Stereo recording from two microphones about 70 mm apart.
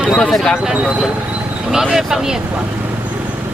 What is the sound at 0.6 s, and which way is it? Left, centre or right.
Speech, centre.